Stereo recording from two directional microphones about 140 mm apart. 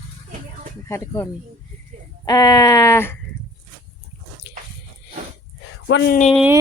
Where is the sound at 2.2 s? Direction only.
25° left (ahead or behind).